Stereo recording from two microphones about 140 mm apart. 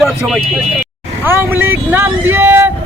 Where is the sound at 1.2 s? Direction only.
15° right (ahead or behind).